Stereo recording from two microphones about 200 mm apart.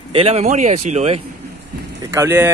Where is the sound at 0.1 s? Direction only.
30° right (ahead or behind).